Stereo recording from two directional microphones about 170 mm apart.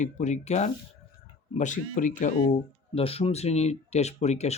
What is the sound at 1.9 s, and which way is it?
Speech, 50° left (ahead or behind).